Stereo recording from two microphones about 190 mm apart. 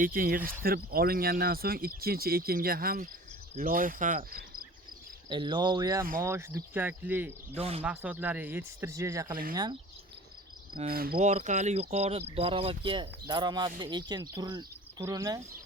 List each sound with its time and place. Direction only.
0.0 s speech: 50° right (ahead or behind)
5.3 s speech: 25° right (ahead or behind)
10.8 s speech: 50° right (ahead or behind)
11.3 s speech: 35° right (ahead or behind); by 15.4 s 20° right (ahead or behind)